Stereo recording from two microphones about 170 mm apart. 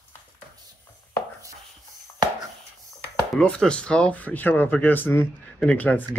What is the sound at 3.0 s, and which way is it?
Speech, 5° left (ahead or behind).